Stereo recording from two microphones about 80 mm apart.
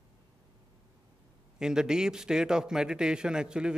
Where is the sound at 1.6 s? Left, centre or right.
Centre.